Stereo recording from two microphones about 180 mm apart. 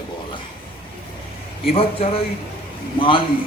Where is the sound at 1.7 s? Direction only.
35° left (ahead or behind).